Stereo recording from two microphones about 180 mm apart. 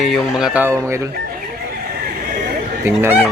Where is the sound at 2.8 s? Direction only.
10° right (ahead or behind).